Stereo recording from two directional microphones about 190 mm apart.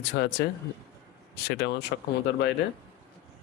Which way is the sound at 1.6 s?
60° left (ahead or behind).